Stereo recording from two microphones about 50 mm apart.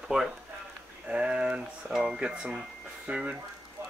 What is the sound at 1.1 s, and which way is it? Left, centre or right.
Speech, right.